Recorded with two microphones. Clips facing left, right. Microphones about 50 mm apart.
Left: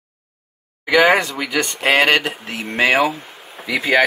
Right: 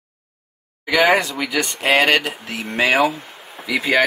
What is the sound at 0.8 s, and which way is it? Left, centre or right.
Speech, left.